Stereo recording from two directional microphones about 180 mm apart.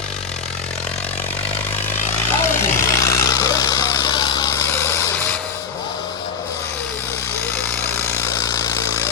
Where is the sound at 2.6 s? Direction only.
15° left (ahead or behind).